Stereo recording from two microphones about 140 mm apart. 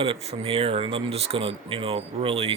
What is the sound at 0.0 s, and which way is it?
Speech, 45° right (ahead or behind).